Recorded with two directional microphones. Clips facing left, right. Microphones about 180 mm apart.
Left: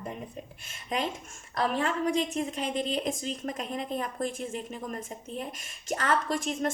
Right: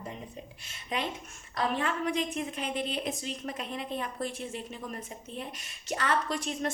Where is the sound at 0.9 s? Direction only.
45° left (ahead or behind).